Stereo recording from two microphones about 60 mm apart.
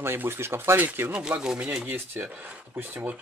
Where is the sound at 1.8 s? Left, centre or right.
Right.